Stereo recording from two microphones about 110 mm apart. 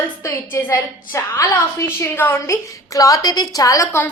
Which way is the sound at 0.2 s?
25° left (ahead or behind).